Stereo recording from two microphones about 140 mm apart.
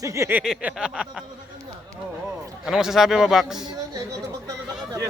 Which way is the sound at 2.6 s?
5° right (ahead or behind).